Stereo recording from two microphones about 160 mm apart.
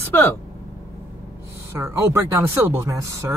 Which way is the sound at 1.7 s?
15° right (ahead or behind).